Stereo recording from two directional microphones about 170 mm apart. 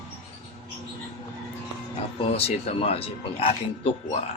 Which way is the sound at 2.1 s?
35° left (ahead or behind).